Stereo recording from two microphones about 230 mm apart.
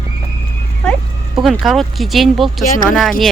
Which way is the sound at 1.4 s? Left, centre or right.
Centre.